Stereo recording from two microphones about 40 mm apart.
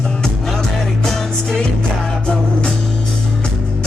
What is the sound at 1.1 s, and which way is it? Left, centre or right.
Music, centre.